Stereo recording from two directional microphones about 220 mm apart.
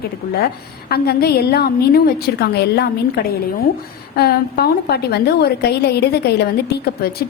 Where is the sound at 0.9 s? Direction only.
45° left (ahead or behind).